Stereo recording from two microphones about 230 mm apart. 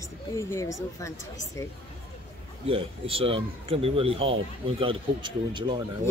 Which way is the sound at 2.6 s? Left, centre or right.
Right.